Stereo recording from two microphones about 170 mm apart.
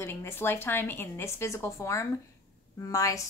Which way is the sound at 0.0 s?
15° left (ahead or behind).